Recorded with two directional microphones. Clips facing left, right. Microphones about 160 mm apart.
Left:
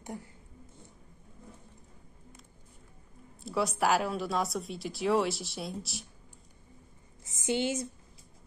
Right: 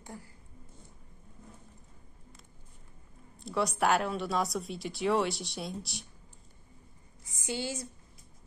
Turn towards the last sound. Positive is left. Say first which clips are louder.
# left 6 dB
turn(degrees=20)  # may be behind; listen again after turning